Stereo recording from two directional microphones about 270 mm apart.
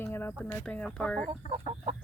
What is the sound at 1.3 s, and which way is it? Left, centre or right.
Speech, centre.